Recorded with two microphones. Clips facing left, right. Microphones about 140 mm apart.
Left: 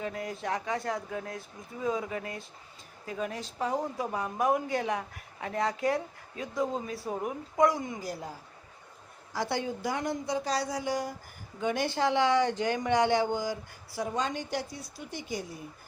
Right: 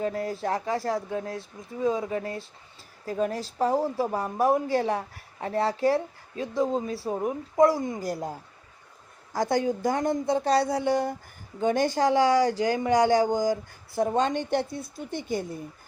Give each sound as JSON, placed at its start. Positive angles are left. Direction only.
{"t": 0.0, "sound": "a woman's voice", "side_deg": -35}
{"t": 8.0, "sound": "speech", "side_deg": -45}
{"t": 9.3, "sound": "a woman's voice", "side_deg": -45}
{"t": 11.6, "sound": "speech", "side_deg": -45}